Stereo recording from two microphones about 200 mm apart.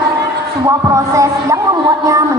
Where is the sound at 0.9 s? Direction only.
15° right (ahead or behind).